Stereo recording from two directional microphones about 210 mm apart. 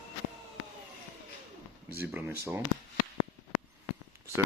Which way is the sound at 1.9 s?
10° right (ahead or behind).